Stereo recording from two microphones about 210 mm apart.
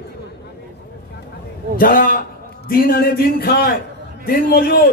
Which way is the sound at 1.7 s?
40° left (ahead or behind).